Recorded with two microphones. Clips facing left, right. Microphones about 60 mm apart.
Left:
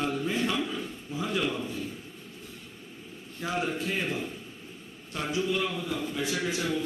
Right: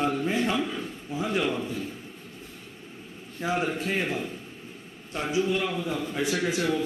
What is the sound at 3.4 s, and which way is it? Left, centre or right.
Speech, right.